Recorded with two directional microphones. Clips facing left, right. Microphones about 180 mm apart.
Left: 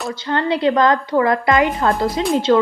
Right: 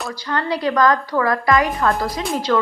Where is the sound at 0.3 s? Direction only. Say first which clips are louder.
Left 4 dB; 25° left (ahead or behind).